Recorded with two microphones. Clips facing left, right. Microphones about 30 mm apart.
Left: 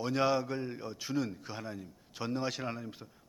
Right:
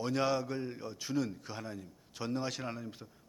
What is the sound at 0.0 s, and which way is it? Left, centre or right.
Speech, centre.